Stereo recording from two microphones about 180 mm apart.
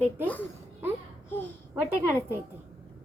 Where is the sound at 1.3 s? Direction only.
10° left (ahead or behind).